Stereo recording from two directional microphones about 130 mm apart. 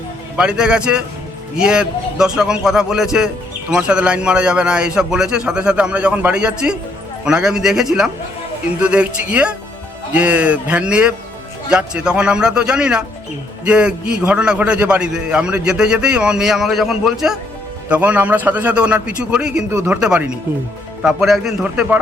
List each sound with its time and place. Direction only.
0.3 s a man's voice: 5° right (ahead or behind)
19.7 s speech: 20° right (ahead or behind)
20.0 s a man's voice: 5° right (ahead or behind)